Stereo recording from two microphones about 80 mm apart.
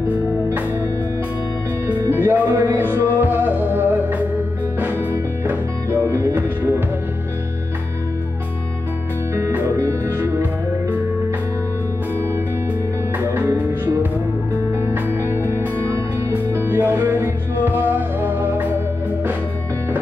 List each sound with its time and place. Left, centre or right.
2.0 s music: right
6.0 s music: right
9.8 s music: right
13.2 s music: right
15.2 s music: right